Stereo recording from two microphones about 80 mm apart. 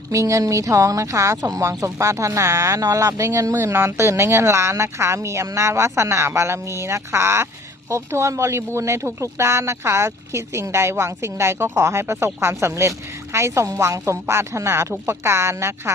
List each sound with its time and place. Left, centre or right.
0.1 s speech: right